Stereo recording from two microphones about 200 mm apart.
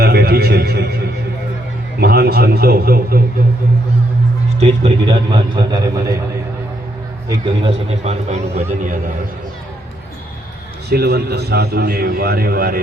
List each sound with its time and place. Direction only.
0.0 s a sound: 50° right (ahead or behind)
2.0 s a man's voice: 50° right (ahead or behind)
4.6 s a man's voice: 25° right (ahead or behind)
7.3 s speech: 25° right (ahead or behind)
10.8 s a man's voice: 55° right (ahead or behind)